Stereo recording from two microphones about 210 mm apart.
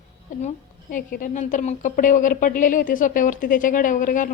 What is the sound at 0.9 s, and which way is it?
A woman's voice, 40° left (ahead or behind).